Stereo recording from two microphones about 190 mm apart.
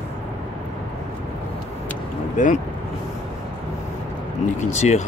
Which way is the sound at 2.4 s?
40° left (ahead or behind).